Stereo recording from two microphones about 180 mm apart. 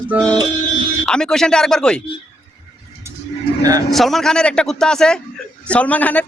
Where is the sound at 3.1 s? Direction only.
15° right (ahead or behind).